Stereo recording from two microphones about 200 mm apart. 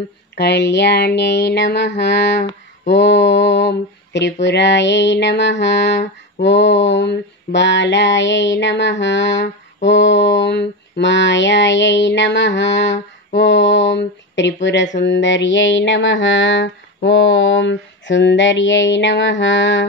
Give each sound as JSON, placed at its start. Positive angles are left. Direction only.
{"t": 0.4, "sound": "female singing", "side_deg": 60}